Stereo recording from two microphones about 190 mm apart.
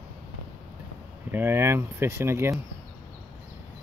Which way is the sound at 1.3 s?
10° right (ahead or behind).